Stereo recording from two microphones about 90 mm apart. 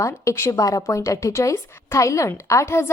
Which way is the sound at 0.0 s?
30° left (ahead or behind).